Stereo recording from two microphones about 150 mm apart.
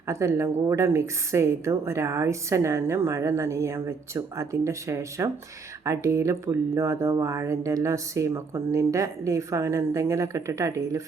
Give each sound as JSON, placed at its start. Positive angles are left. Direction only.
{"t": 0.1, "sound": "a woman's voice", "side_deg": -20}